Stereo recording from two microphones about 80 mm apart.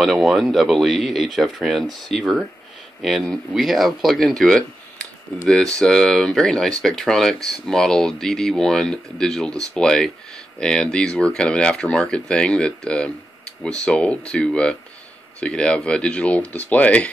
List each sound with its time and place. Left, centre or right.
0.0 s speech: centre